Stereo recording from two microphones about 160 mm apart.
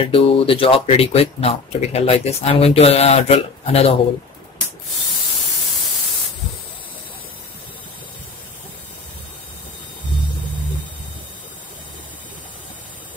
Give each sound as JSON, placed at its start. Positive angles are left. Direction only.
{"t": 0.0, "sound": "speech", "side_deg": 35}